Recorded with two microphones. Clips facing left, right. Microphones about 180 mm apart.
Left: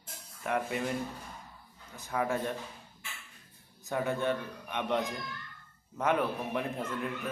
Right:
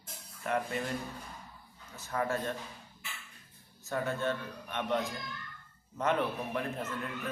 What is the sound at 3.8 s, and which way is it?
A man's voice, 15° left (ahead or behind).